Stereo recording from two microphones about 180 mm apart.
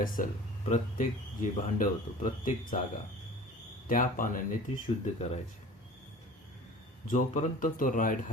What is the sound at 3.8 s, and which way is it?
Speech, 50° left (ahead or behind).